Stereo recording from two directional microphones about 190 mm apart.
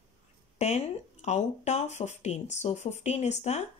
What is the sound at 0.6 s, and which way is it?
Speech, 35° left (ahead or behind).